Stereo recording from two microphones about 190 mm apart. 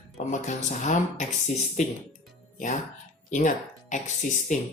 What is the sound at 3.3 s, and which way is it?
A woman's voice, 40° left (ahead or behind).